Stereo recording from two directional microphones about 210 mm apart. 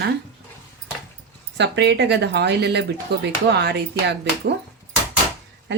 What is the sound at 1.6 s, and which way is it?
Speech, 55° right (ahead or behind).